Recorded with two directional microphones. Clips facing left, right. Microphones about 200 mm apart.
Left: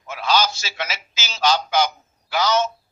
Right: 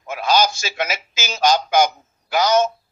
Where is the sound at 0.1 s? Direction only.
45° right (ahead or behind).